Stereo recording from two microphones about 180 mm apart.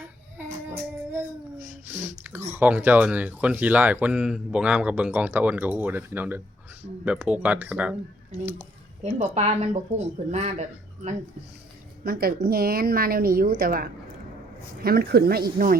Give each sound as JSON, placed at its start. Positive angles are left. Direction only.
{"t": 0.3, "sound": "child singing", "side_deg": -15}
{"t": 1.9, "sound": "speech", "side_deg": -10}
{"t": 9.0, "sound": "speech", "side_deg": -40}
{"t": 12.0, "sound": "a woman's voice", "side_deg": -60}